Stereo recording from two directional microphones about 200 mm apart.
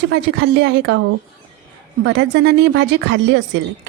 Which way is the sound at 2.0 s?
60° right (ahead or behind).